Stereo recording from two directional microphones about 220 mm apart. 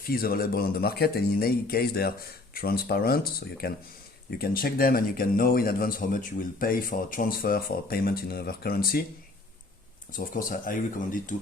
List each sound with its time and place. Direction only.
0.0 s speech: 40° left (ahead or behind)
10.1 s speech: 40° left (ahead or behind)